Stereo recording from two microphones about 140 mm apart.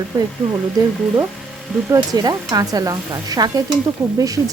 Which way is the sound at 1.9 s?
25° right (ahead or behind).